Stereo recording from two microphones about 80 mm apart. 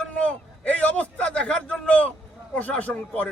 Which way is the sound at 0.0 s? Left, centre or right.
Centre.